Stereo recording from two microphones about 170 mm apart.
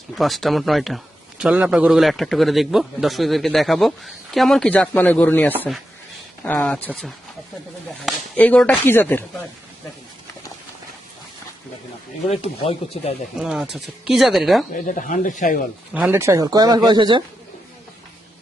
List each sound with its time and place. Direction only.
0.2 s a man's voice: centre (ahead or behind)
12.3 s speech: 35° left (ahead or behind)
13.4 s a man's voice: 5° right (ahead or behind)
14.8 s speech: 50° left (ahead or behind)
16.0 s speech: 10° right (ahead or behind); by 17.2 s 25° right (ahead or behind)